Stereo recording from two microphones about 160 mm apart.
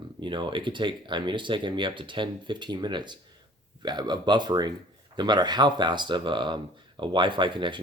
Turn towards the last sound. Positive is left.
turn(degrees=-30)  # may be behind; listen again after turning